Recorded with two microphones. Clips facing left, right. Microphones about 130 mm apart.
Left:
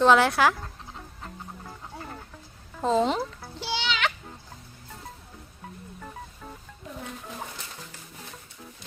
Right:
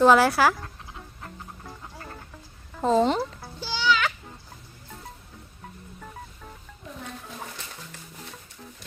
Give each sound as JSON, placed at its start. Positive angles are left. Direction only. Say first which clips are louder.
{"t": 0.0, "sound": "speech", "louder": "right 2 dB", "side_deg": -5}
{"t": 2.8, "sound": "speech", "louder": "right 2 dB", "side_deg": 0}
{"t": 3.6, "sound": "a sound", "louder": "right 4 dB", "side_deg": 70}